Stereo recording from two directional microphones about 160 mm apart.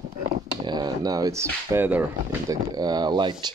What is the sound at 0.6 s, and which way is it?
Speech, 25° right (ahead or behind).